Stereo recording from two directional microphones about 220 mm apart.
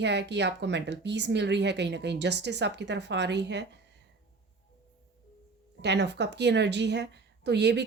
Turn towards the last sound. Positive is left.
turn(degrees=-50)  # may be behind; listen again after turning